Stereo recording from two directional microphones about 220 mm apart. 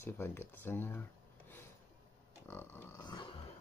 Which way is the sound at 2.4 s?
10° left (ahead or behind).